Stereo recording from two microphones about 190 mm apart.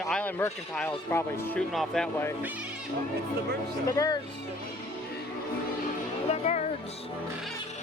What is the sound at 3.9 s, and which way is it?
Speech, 20° left (ahead or behind).